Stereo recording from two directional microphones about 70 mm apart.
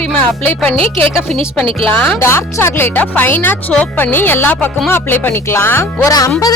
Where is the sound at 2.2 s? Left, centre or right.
Left.